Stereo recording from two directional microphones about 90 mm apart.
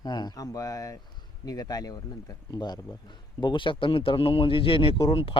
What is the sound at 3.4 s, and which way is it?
Speech, 65° left (ahead or behind).